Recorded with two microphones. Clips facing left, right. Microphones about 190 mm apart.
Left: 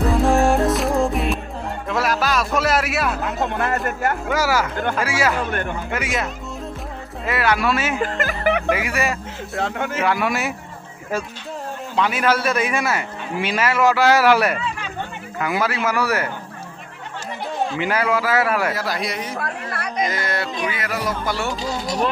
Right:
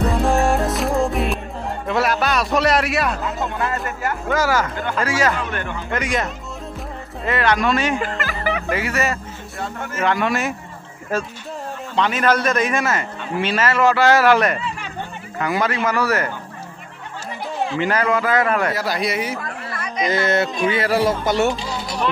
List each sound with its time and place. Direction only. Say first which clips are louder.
0.0 s music: left 1 dB; centre (ahead or behind)
3.2 s speech: left 1 dB; 60° left (ahead or behind)
4.3 s a man's voice: right 4 dB; 10° left (ahead or behind)
8.5 s speech: left 4 dB; 60° left (ahead or behind)
8.7 s a man's voice: right 1 dB; 10° left (ahead or behind)
9.6 s speech: left 5 dB; 85° left
10.0 s a man's voice: right 3 dB; 10° left (ahead or behind)
11.9 s a man's voice: right 1 dB; 10° left (ahead or behind)
17.7 s a man's voice: right 2 dB; 10° left (ahead or behind)
19.4 s a sound: left 2 dB; 70° left (ahead or behind)
20.1 s speech: right 6 dB; 25° right (ahead or behind)